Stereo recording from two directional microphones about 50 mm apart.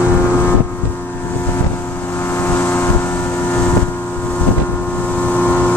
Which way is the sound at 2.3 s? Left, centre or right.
Left.